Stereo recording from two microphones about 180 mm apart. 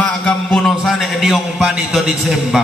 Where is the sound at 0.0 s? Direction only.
5° left (ahead or behind).